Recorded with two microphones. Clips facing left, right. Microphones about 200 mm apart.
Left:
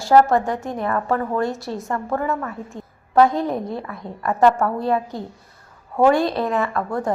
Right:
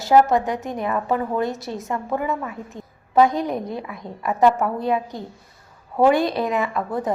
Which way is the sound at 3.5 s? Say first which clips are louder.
Left 1 dB; centre (ahead or behind).